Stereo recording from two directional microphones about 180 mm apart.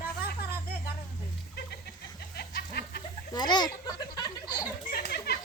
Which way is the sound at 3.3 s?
25° left (ahead or behind).